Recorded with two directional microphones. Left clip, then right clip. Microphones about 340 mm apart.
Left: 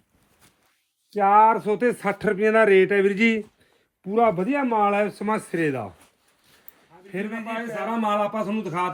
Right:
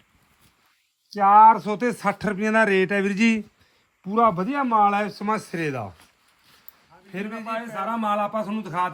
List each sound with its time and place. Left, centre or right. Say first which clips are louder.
1.1 s speech: right 3 dB; centre
7.1 s a man's voice: even; centre